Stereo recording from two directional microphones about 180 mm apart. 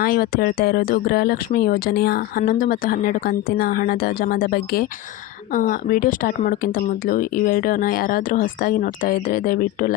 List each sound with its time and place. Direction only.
0.0 s speech: 55° left (ahead or behind)